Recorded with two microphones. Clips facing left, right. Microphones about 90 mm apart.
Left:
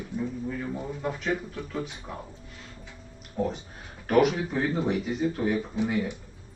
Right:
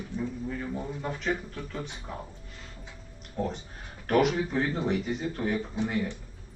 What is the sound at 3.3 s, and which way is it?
Speech, centre (ahead or behind).